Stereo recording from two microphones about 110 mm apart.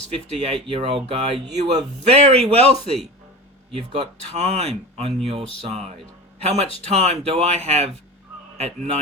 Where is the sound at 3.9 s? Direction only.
70° right (ahead or behind).